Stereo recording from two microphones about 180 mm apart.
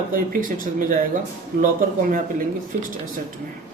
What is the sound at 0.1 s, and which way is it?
Speech, 50° right (ahead or behind).